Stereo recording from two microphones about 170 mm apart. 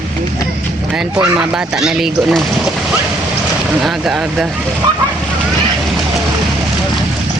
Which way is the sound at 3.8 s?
Centre (ahead or behind).